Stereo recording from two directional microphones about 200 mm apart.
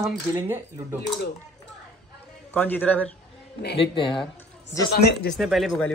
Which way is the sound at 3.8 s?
25° left (ahead or behind).